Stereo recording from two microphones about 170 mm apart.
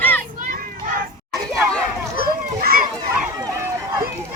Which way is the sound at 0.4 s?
55° right (ahead or behind).